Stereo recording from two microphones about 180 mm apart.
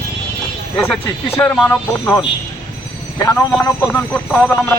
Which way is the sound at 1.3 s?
5° left (ahead or behind).